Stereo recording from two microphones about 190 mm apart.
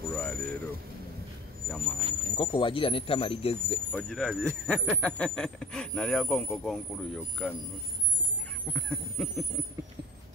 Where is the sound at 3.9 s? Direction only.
5° left (ahead or behind).